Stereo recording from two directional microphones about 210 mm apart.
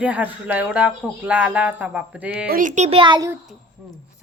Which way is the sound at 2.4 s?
40° right (ahead or behind).